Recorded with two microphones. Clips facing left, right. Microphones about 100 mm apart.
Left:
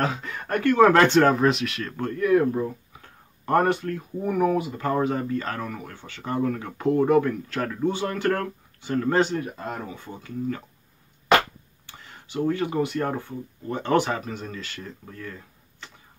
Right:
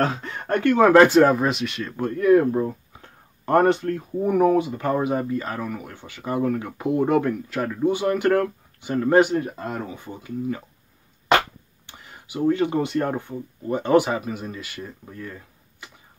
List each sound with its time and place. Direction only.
0.0 s speech: 35° right (ahead or behind)
1.0 s speech: 5° right (ahead or behind)
2.1 s speech: 30° right (ahead or behind); by 7.1 s 5° right (ahead or behind)
7.1 s speech: 20° right (ahead or behind)
11.8 s speech: 15° right (ahead or behind)